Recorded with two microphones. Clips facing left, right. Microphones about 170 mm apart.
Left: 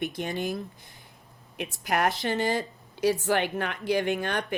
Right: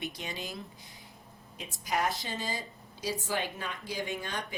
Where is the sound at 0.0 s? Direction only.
55° left (ahead or behind).